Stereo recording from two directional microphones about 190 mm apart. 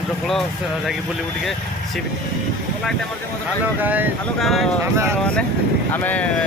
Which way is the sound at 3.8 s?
10° right (ahead or behind).